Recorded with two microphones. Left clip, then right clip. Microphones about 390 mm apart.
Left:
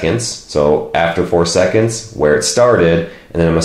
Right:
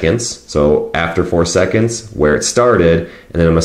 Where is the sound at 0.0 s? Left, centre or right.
Right.